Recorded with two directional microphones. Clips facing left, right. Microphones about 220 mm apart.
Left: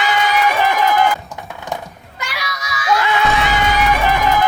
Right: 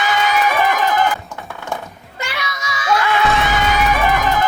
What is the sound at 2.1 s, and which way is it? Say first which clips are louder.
Music: right 1 dB; 25° right (ahead or behind).